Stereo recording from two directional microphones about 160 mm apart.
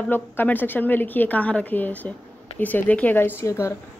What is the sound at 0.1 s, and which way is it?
A woman's voice, 10° left (ahead or behind).